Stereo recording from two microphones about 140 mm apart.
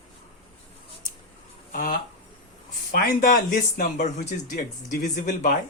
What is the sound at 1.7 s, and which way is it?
Speech, 90° left.